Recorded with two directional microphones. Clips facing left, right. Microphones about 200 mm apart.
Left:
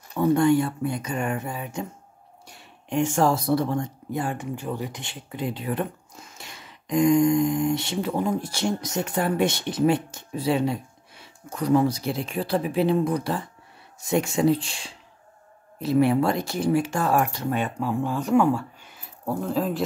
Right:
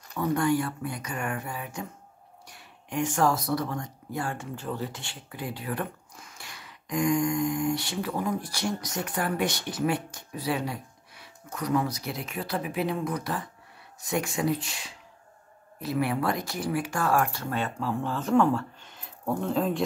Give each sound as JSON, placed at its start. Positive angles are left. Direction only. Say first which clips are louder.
{"t": 0.1, "sound": "speech", "louder": "left 6 dB", "side_deg": 25}